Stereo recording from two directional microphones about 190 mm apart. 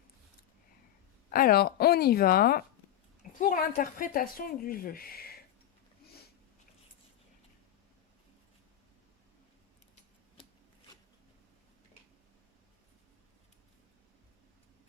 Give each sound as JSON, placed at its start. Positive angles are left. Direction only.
{"t": 1.3, "sound": "speech", "side_deg": 50}